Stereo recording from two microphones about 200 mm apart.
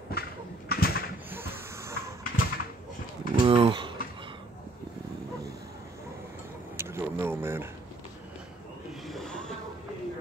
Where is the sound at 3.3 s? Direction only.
25° right (ahead or behind).